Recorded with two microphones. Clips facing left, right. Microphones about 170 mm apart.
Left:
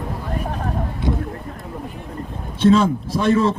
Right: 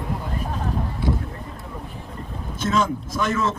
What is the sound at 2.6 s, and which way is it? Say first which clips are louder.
Speech: left 8 dB; 30° left (ahead or behind).